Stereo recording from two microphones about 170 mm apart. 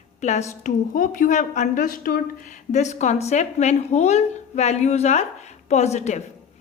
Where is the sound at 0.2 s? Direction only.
40° left (ahead or behind).